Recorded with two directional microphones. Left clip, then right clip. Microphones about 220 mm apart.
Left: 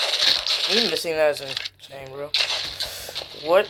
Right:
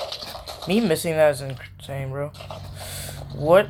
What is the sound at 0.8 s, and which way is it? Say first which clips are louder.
Speech: right 2 dB; centre (ahead or behind).